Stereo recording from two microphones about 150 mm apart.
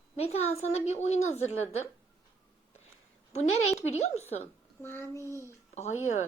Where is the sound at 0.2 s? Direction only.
45° left (ahead or behind).